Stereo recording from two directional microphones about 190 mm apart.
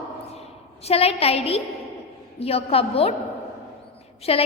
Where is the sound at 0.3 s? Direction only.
35° left (ahead or behind).